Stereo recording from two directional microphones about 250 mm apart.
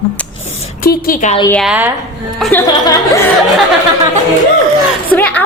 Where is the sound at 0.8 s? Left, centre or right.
Left.